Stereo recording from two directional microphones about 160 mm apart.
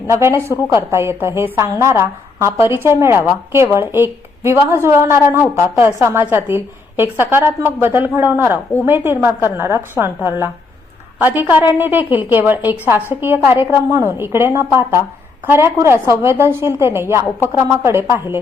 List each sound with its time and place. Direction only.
0.1 s a woman's voice: 15° right (ahead or behind)